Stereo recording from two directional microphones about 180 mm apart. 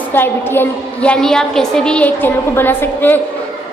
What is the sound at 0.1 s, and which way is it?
A woman's voice, 10° left (ahead or behind).